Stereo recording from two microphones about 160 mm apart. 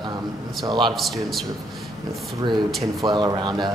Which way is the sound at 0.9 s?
Centre (ahead or behind).